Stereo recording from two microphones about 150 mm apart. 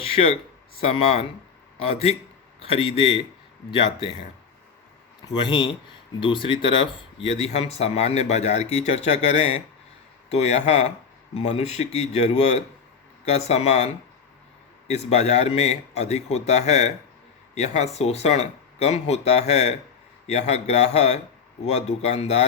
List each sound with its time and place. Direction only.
0.0 s a sound: 40° left (ahead or behind)
0.8 s speech: 40° left (ahead or behind)
5.2 s a man's voice: 30° left (ahead or behind); by 22.4 s 45° left (ahead or behind)